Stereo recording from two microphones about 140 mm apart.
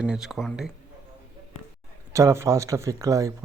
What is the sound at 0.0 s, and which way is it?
Speech, 5° right (ahead or behind).